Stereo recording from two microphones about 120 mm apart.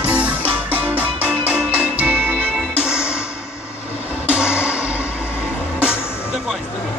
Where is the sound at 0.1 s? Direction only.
10° right (ahead or behind).